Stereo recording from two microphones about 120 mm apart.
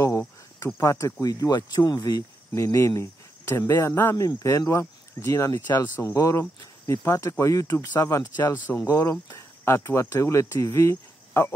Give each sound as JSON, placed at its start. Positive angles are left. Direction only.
{"t": 0.7, "sound": "speech", "side_deg": 25}
{"t": 6.6, "sound": "cricket", "side_deg": 35}
{"t": 7.1, "sound": "speech", "side_deg": 25}
{"t": 8.5, "sound": "speech", "side_deg": 15}